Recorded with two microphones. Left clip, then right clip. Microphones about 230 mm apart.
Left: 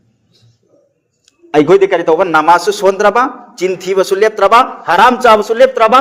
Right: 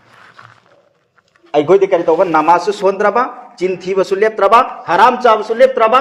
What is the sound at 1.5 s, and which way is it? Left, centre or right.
A man's voice, left.